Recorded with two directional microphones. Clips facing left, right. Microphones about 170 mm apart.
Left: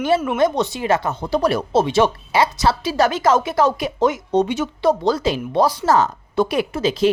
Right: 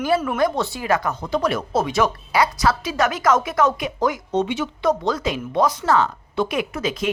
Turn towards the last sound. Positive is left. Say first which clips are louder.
# left 6 dB
turn(degrees=30)  # may be behind; listen again after turning